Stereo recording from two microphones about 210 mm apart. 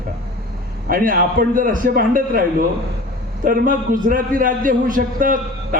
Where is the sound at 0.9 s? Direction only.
40° right (ahead or behind).